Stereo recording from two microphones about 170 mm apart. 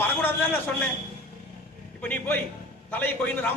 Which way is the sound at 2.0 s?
10° left (ahead or behind).